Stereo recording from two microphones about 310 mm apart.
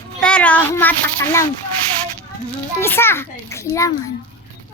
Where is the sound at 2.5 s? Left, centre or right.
Centre.